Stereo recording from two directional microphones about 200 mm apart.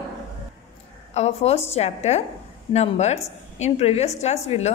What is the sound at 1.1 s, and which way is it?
A woman's voice, 30° left (ahead or behind).